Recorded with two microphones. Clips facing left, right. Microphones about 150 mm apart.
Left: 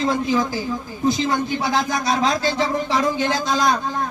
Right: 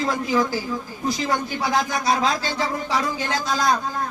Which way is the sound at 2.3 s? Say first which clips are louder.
Left 4 dB; 25° left (ahead or behind).